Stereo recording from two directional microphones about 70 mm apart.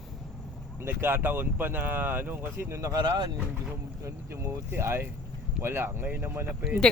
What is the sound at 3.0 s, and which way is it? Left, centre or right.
Speech, right.